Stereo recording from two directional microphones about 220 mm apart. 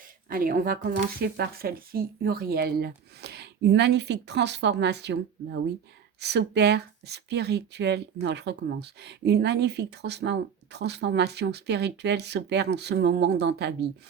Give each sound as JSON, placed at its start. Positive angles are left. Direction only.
{"t": 0.3, "sound": "speech", "side_deg": -40}